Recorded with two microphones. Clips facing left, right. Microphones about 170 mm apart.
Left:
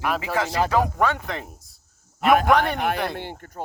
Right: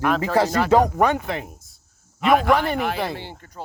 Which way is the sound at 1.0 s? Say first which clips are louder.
Right 3 dB; 10° right (ahead or behind).